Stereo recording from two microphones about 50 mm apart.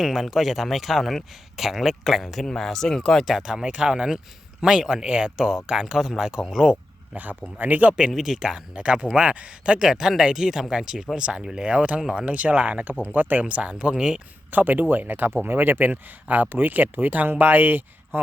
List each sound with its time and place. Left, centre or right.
0.0 s speech: centre
3.2 s speech: centre
7.1 s speech: right
7.9 s speech: centre
14.5 s speech: right